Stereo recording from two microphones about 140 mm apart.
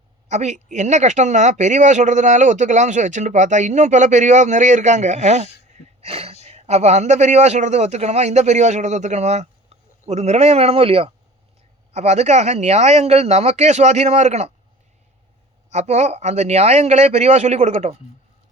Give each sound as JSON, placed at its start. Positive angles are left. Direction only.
{"t": 0.3, "sound": "speech", "side_deg": -55}
{"t": 6.0, "sound": "a man's voice", "side_deg": -45}
{"t": 11.9, "sound": "a man's voice", "side_deg": -55}
{"t": 15.7, "sound": "a man's voice", "side_deg": -55}